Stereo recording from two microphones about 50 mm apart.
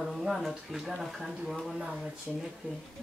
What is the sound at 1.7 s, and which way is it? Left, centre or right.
Speech, centre.